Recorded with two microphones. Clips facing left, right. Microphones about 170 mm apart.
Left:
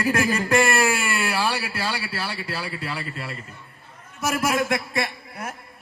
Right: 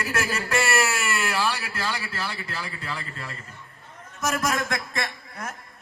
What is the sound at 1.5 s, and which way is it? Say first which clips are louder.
A man's voice: left 3 dB; 10° left (ahead or behind).